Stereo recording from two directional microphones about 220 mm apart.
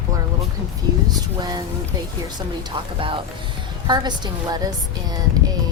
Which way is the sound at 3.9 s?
20° right (ahead or behind).